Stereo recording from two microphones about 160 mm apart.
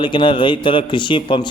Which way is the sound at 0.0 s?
30° left (ahead or behind).